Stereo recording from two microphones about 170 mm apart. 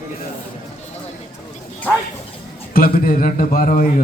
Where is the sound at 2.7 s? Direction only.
60° left (ahead or behind).